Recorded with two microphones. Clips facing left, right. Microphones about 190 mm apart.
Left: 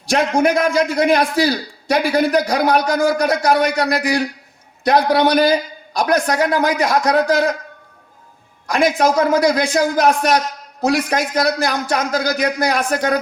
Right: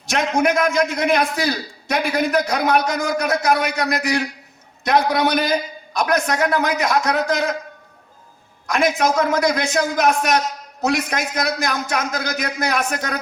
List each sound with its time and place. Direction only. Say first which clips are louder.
0.1 s a man's voice: left 3 dB; 35° left (ahead or behind)
8.6 s a man's voice: left 3 dB; 35° left (ahead or behind)